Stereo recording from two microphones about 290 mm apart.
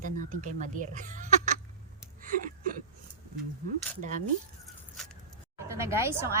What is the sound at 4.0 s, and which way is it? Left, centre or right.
Speech, right.